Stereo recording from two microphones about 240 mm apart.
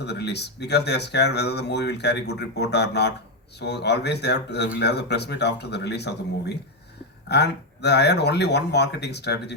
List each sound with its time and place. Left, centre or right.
0.0 s speech: left